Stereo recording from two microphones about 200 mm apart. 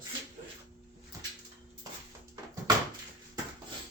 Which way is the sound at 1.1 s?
15° right (ahead or behind).